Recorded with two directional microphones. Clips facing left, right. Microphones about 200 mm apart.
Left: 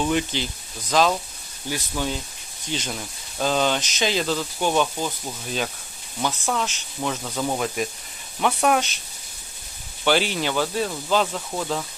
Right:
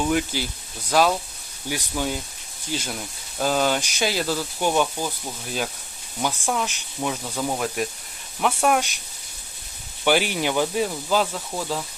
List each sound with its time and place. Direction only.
0.0 s speech: 5° right (ahead or behind)
6.2 s speech: 10° right (ahead or behind)
10.0 s speech: 10° right (ahead or behind)